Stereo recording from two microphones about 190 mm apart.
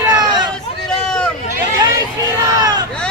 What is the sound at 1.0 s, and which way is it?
Hubbub, 5° left (ahead or behind).